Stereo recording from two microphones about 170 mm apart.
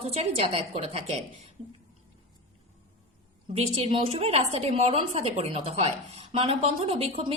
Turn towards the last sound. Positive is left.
turn(degrees=-35)  # may be behind; listen again after turning